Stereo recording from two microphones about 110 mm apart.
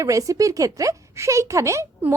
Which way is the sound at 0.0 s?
30° right (ahead or behind).